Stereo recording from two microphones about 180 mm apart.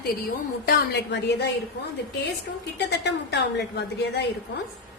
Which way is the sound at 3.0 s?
70° left (ahead or behind).